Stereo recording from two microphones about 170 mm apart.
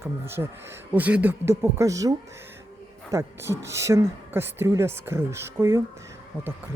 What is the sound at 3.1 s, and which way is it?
Speech, 15° right (ahead or behind).